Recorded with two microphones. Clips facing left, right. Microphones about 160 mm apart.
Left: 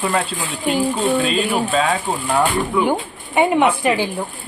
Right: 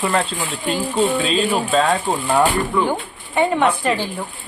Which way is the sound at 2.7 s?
15° left (ahead or behind).